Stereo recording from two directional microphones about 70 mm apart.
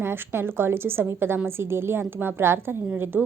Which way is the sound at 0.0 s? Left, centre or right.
Right.